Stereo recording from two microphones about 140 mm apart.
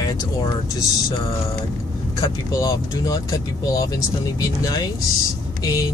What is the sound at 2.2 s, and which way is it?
Speech, 25° left (ahead or behind).